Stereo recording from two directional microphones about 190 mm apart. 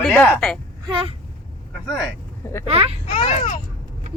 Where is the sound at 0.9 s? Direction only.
25° right (ahead or behind).